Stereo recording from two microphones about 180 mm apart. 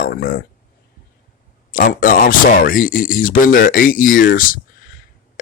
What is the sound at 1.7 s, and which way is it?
Speech, 50° left (ahead or behind).